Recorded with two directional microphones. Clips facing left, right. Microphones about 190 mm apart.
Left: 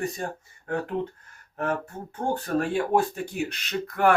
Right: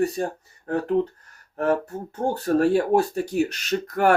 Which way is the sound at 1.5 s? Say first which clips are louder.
Right 6 dB; 35° right (ahead or behind).